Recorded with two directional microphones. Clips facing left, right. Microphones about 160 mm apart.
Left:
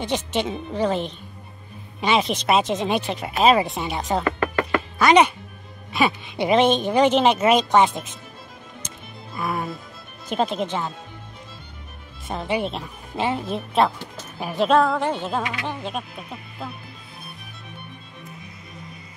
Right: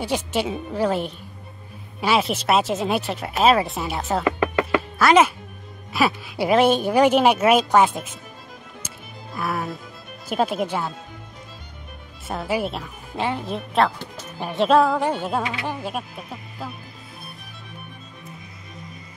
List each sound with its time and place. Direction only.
0.0 s a woman's voice: 10° right (ahead or behind)
4.4 s music: 20° right (ahead or behind)
4.9 s a woman's voice: centre (ahead or behind)
8.8 s music: centre (ahead or behind)
10.2 s a woman's voice: 10° right (ahead or behind)
12.3 s a woman's voice: 5° right (ahead or behind)